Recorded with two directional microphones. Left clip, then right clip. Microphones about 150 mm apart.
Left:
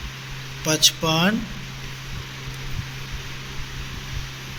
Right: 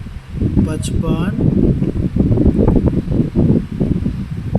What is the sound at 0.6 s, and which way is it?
Speech, centre (ahead or behind).